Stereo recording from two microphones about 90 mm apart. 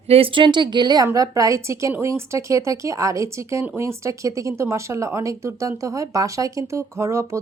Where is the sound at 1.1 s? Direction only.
40° right (ahead or behind).